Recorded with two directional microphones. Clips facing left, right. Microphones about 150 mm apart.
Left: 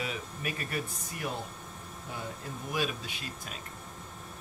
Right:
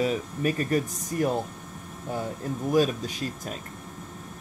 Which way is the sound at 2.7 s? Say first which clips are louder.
Right 10 dB; 40° right (ahead or behind).